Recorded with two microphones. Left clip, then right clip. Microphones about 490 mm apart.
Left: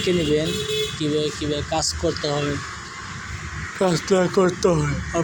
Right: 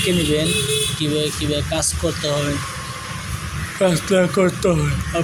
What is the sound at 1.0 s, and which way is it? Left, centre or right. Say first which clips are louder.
Speech: right 2 dB; right.